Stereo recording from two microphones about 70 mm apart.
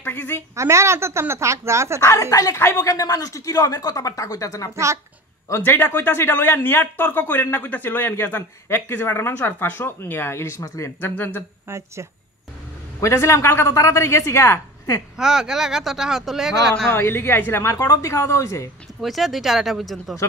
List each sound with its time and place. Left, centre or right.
0.0 s a woman's voice: left
0.6 s speech: right
2.0 s speech: left
2.5 s speech: left
2.9 s speech: left
5.6 s speech: left
11.6 s speech: right
13.0 s a woman's voice: left
15.1 s speech: centre
16.9 s speech: left
17.7 s speech: left
18.0 s a woman's voice: left
18.9 s speech: centre